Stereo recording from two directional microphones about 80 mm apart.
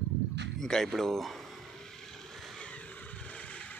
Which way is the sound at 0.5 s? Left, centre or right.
Centre.